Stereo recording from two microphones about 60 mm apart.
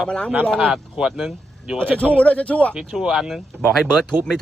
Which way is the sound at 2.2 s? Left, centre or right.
Left.